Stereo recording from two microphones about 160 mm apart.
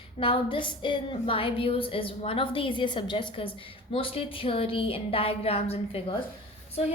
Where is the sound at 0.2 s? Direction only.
35° left (ahead or behind).